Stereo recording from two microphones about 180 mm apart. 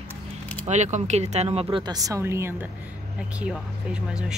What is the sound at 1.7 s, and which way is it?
Speech, 20° right (ahead or behind).